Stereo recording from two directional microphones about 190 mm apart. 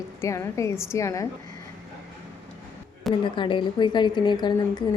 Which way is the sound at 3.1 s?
25° left (ahead or behind).